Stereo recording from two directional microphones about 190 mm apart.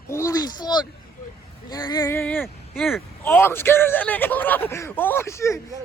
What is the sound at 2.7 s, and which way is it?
Speech, centre (ahead or behind).